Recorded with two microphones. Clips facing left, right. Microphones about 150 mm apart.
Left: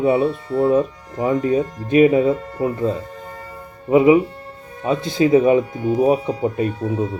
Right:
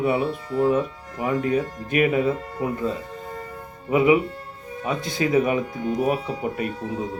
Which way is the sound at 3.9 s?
30° left (ahead or behind).